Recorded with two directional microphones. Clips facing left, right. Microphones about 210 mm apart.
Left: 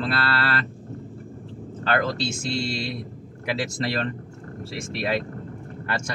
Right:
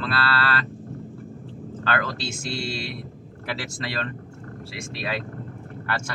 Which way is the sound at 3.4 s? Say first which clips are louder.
Left 5 dB; 15° left (ahead or behind).